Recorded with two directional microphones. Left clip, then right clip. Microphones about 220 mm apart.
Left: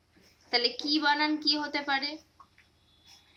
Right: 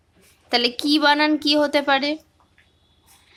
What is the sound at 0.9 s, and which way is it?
A woman's voice, 50° right (ahead or behind).